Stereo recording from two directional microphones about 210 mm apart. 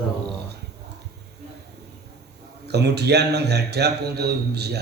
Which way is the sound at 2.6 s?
50° right (ahead or behind).